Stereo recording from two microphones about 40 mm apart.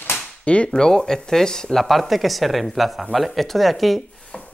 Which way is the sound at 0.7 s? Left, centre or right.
Centre.